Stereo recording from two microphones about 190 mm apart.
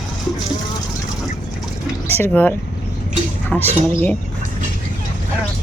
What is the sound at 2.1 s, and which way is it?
Speech, 10° left (ahead or behind).